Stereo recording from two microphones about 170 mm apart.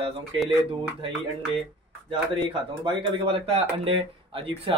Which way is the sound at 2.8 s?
30° right (ahead or behind).